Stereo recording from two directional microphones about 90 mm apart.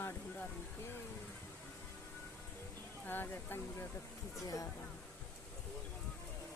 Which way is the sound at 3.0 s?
20° left (ahead or behind).